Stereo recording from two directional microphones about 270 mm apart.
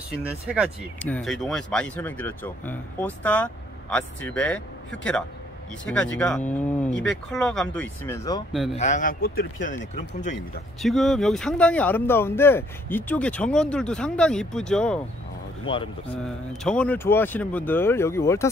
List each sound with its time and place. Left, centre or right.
0.1 s speech: centre
8.7 s speech: left
10.8 s speech: centre
15.7 s speech: centre
16.6 s speech: centre